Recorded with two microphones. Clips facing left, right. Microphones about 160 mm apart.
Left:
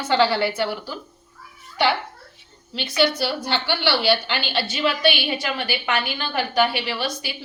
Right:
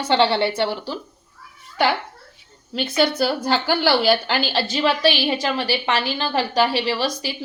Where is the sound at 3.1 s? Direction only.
45° right (ahead or behind).